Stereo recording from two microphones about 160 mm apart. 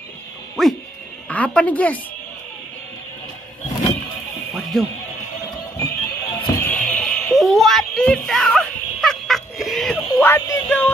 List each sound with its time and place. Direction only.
0.6 s sheep: centre (ahead or behind)
1.3 s a woman's voice: 10° left (ahead or behind)
4.7 s speech: centre (ahead or behind)
5.8 s music: 20° left (ahead or behind)
6.7 s a sound: 10° left (ahead or behind)
10.2 s a woman's voice: 15° left (ahead or behind)